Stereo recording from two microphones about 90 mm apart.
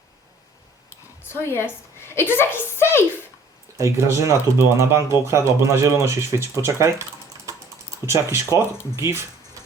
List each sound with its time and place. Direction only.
1.3 s a woman's voice: 25° left (ahead or behind)
3.8 s speech: 30° right (ahead or behind)
8.0 s speech: 30° right (ahead or behind)